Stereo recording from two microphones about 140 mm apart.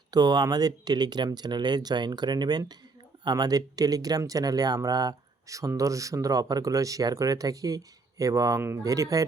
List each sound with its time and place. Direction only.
0.1 s speech: 30° right (ahead or behind)